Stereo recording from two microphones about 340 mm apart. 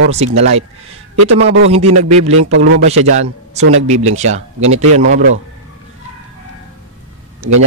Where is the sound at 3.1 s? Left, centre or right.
Centre.